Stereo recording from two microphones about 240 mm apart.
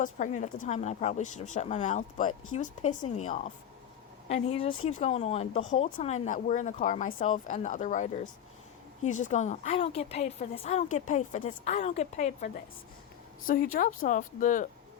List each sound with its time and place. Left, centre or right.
0.0 s speech: left
4.3 s speech: left
4.7 s speech: left
4.9 s speech: left
13.5 s speech: left